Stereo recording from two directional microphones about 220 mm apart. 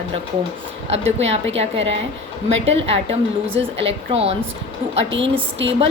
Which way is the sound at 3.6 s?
55° right (ahead or behind).